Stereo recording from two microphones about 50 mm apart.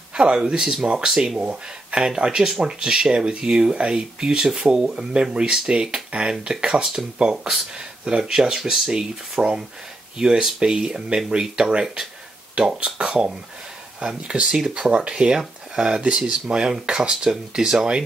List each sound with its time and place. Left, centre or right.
0.1 s speech: centre
1.4 s speech: right
8.0 s speech: centre